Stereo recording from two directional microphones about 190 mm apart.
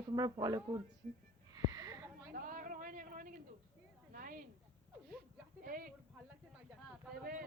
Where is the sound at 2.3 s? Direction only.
45° right (ahead or behind).